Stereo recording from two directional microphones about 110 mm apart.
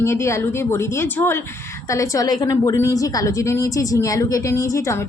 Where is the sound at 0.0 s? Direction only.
25° left (ahead or behind).